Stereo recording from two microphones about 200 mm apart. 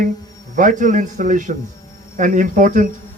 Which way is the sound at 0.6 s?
40° right (ahead or behind).